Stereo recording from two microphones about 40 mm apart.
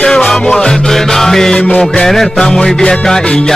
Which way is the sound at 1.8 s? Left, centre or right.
Centre.